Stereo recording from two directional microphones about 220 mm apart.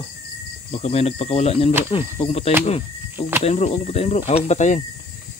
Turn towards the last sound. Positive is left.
turn(degrees=30)  # may be behind; listen again after turning